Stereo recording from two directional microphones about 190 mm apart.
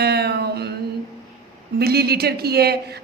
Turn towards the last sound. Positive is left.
turn(degrees=-55)  # may be behind; listen again after turning